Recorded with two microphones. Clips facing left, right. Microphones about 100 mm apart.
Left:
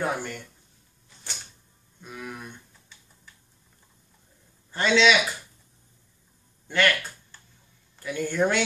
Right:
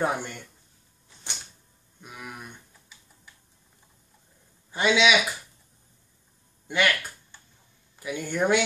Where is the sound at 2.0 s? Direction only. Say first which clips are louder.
Left 3 dB; 10° right (ahead or behind).